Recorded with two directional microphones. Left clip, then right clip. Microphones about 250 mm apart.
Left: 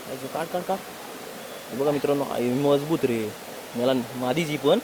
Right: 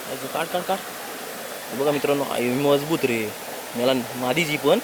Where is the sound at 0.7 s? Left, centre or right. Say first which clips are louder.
Right 3 dB; centre.